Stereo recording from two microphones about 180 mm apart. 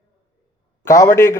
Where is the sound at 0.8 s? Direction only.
15° left (ahead or behind).